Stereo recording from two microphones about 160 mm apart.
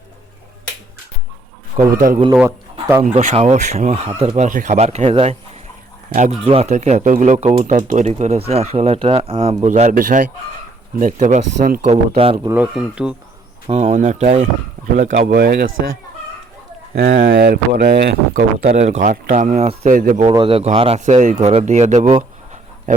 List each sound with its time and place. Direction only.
1.8 s speech: 50° right (ahead or behind)
3.0 s speech: 50° right (ahead or behind)
6.4 s speech: 35° right (ahead or behind)
9.9 s speech: 55° right (ahead or behind)
11.9 s speech: 35° right (ahead or behind)
12.5 s speech: 10° right (ahead or behind)
13.7 s speech: 40° right (ahead or behind); by 15.3 s 55° right (ahead or behind)
15.3 s speech: 75° right (ahead or behind)
16.9 s speech: 75° right (ahead or behind)
18.6 s speech: 40° right (ahead or behind); by 20.2 s 60° right (ahead or behind)
20.2 s speech: 30° right (ahead or behind)
21.0 s speech: 50° right (ahead or behind)